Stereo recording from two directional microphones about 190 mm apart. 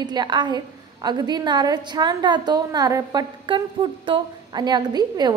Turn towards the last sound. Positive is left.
turn(degrees=-20)  # may be behind; listen again after turning